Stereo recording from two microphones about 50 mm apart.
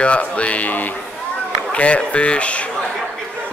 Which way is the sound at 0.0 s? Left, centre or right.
Left.